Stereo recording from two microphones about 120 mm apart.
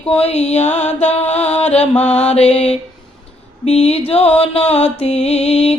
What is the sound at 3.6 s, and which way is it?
Music, 60° left (ahead or behind).